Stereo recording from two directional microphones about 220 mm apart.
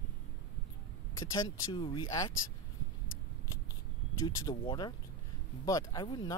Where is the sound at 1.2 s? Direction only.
20° left (ahead or behind).